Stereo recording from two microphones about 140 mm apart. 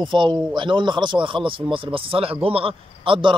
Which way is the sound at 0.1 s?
35° right (ahead or behind).